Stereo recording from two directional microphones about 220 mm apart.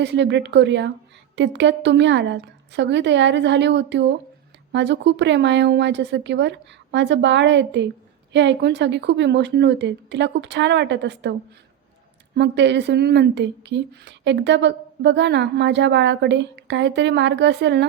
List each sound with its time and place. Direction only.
0.0 s speech: 50° right (ahead or behind)